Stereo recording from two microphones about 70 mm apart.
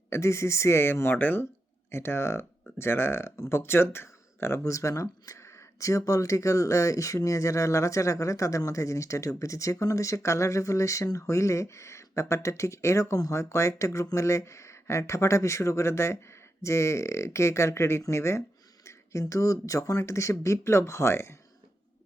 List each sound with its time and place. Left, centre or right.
0.1 s speech: left
4.6 s speech: left